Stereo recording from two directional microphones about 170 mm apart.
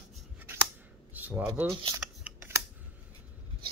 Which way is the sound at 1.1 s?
10° right (ahead or behind).